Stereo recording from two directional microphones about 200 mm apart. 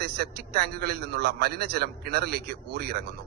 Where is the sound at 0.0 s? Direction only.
55° right (ahead or behind).